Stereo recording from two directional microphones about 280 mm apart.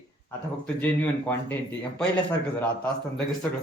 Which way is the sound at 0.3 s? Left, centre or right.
Centre.